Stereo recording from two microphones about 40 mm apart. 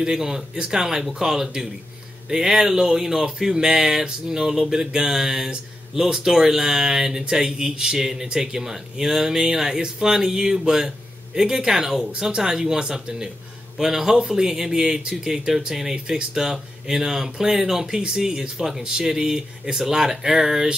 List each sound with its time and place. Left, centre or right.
0.0 s speech: centre